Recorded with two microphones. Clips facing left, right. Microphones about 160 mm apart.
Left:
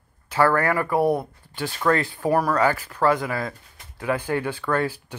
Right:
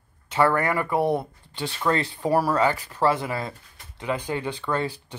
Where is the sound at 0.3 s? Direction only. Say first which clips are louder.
Left 1 dB; 25° right (ahead or behind).